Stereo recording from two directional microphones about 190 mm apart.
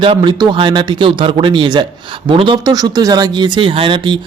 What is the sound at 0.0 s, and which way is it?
Speech, 25° right (ahead or behind).